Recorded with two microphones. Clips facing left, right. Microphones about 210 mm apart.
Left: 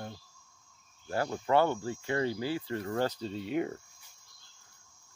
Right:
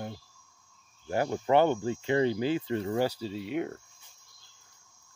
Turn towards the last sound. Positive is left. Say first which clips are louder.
# even
turn(degrees=0)  # may be behind; listen again after turning